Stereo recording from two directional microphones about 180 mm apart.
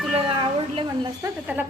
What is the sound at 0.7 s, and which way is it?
Speech, 30° right (ahead or behind).